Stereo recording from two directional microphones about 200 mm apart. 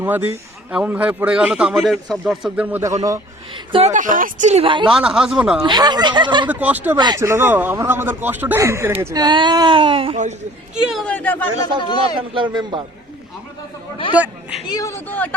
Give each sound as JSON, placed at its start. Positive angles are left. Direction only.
{"t": 0.0, "sound": "a man's voice", "side_deg": -10}
{"t": 3.0, "sound": "a woman's voice", "side_deg": -20}
{"t": 4.9, "sound": "a man's voice", "side_deg": -5}
{"t": 5.6, "sound": "speech", "side_deg": -20}
{"t": 6.5, "sound": "speech", "side_deg": -10}
{"t": 6.9, "sound": "speech", "side_deg": -20}
{"t": 10.9, "sound": "speech", "side_deg": 5}
{"t": 12.0, "sound": "speech", "side_deg": -25}
{"t": 14.7, "sound": "speech", "side_deg": 15}